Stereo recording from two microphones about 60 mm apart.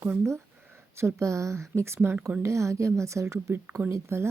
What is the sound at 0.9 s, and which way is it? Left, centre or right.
Speech, right.